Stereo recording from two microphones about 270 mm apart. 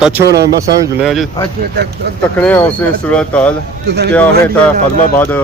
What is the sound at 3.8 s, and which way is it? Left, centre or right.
Speech, right.